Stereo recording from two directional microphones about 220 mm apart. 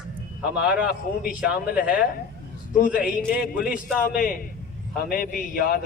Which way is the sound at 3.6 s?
5° right (ahead or behind).